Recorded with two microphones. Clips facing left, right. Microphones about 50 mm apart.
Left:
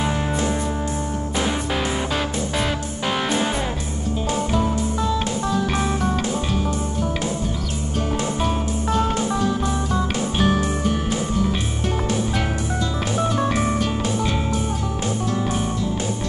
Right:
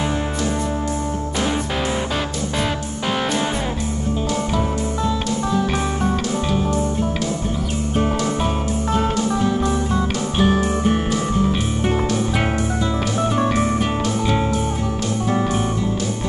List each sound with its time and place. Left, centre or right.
8.9 s music: centre
13.5 s music: centre